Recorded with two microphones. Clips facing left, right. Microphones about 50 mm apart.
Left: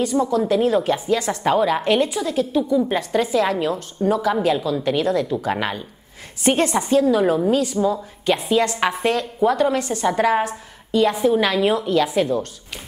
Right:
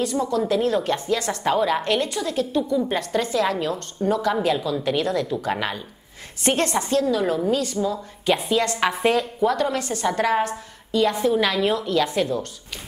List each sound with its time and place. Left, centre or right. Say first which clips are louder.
0.0 s a woman's voice: left 3 dB; centre
9.0 s a woman's voice: right 3 dB; centre
9.4 s a woman's voice: left 3 dB; centre